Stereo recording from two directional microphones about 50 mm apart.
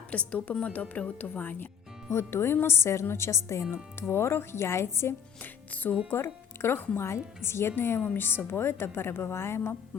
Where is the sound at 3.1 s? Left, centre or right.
Left.